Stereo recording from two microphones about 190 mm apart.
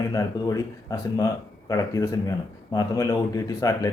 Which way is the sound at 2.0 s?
10° left (ahead or behind).